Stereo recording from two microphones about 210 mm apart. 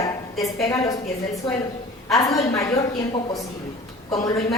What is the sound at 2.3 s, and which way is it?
Speech, 15° left (ahead or behind).